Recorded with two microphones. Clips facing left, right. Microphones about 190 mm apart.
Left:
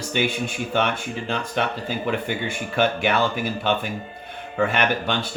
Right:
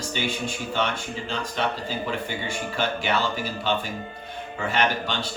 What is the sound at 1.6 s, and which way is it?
Speech, 60° left (ahead or behind).